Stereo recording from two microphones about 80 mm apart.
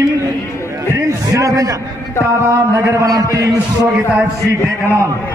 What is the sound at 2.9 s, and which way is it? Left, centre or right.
A man's voice, right.